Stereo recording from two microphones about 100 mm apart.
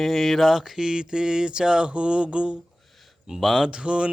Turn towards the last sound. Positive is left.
turn(degrees=-10)  # may be behind; listen again after turning